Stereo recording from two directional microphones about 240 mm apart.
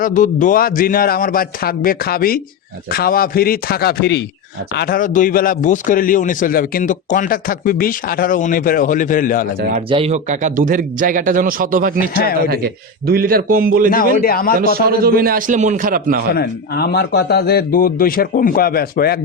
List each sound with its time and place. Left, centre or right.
0.0 s a man's voice: left
9.6 s speech: right
9.9 s speech: right
14.2 s a man's voice: left
14.8 s speech: right
16.3 s a man's voice: left